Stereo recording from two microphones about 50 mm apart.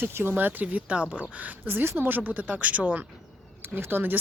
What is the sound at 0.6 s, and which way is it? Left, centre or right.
Speech, right.